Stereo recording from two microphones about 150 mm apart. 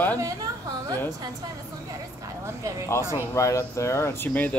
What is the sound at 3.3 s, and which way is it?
Speech, 20° left (ahead or behind).